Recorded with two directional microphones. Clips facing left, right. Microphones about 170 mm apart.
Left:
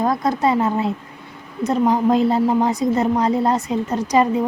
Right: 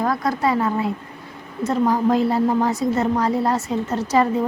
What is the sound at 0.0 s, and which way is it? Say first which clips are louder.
A woman's voice: left 2 dB; 20° left (ahead or behind).